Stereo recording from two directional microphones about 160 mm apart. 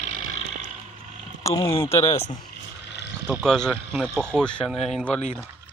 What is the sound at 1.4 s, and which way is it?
Speech, 20° left (ahead or behind).